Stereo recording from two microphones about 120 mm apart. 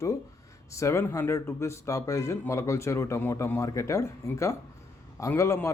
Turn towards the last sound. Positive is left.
turn(degrees=25)  # may be behind; listen again after turning